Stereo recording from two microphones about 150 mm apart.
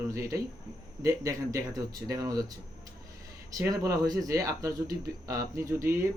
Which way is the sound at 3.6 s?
25° right (ahead or behind).